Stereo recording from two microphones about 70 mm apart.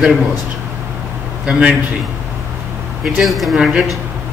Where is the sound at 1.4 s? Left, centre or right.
Centre.